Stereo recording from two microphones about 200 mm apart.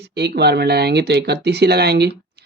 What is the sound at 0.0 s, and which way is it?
Speech, 55° right (ahead or behind).